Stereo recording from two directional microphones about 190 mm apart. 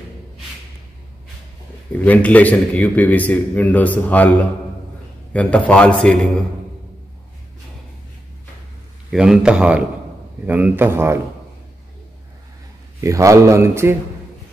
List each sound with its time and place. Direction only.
1.9 s a man's voice: 10° left (ahead or behind)
5.3 s a man's voice: 5° left (ahead or behind)
9.1 s a man's voice: 5° right (ahead or behind)
13.0 s a man's voice: 15° right (ahead or behind)